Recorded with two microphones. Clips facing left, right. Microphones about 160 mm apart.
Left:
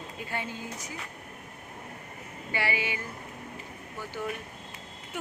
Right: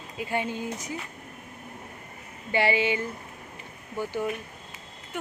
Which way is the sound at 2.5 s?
25° right (ahead or behind).